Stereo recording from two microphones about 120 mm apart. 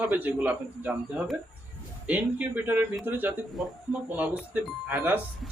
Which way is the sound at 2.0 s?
10° right (ahead or behind).